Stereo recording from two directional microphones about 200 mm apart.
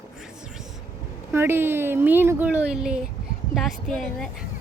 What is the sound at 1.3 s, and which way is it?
Speech, 10° right (ahead or behind).